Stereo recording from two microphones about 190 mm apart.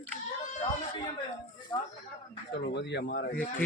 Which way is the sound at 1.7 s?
25° left (ahead or behind).